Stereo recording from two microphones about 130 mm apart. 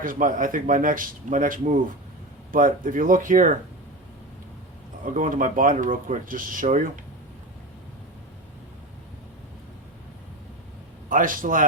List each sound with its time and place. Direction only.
0.0 s speech: 90° right
5.0 s speech: 90° right
11.1 s speech: 90° right